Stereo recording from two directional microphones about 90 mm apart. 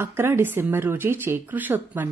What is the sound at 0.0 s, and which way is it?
Speech, 25° right (ahead or behind).